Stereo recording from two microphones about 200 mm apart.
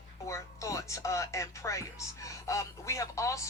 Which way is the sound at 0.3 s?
15° left (ahead or behind).